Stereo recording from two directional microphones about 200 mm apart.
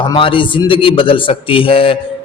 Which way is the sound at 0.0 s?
25° left (ahead or behind).